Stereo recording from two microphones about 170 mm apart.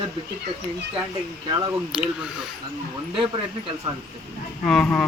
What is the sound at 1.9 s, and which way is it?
Speech, 5° right (ahead or behind).